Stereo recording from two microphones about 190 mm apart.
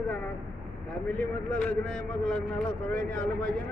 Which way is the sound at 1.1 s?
5° left (ahead or behind).